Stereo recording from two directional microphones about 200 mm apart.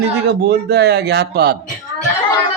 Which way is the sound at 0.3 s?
55° right (ahead or behind).